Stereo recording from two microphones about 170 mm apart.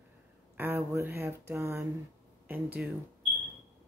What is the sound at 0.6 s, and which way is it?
Speech, 10° right (ahead or behind).